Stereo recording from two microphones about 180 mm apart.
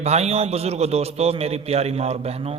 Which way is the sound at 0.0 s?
35° right (ahead or behind).